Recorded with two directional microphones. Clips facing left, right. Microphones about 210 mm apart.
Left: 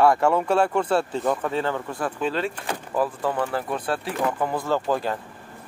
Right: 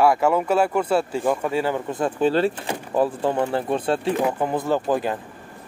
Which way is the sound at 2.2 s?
35° right (ahead or behind).